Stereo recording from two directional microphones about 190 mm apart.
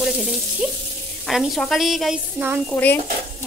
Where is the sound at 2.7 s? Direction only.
10° left (ahead or behind).